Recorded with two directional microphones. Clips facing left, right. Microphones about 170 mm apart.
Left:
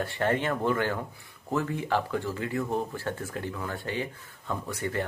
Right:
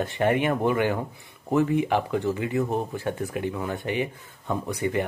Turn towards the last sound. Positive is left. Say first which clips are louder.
# right 5 dB
turn(degrees=-15)  # may be behind; listen again after turning